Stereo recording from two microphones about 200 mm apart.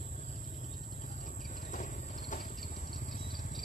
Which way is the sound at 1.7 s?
40° left (ahead or behind).